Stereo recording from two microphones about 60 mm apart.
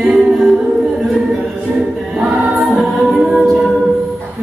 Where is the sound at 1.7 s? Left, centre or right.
Centre.